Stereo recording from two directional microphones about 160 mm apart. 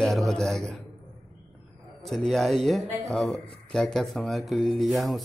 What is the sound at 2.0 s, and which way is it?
A man's voice, centre (ahead or behind).